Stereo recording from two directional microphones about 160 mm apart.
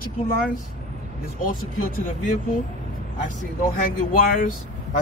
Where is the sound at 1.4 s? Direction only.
60° left (ahead or behind).